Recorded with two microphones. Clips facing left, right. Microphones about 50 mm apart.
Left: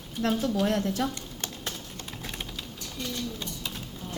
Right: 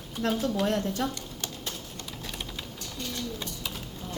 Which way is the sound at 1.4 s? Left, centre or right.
Left.